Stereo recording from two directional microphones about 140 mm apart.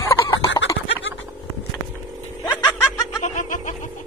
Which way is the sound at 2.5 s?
25° left (ahead or behind).